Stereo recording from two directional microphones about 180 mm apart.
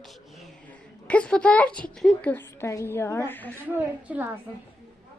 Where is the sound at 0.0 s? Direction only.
Centre (ahead or behind).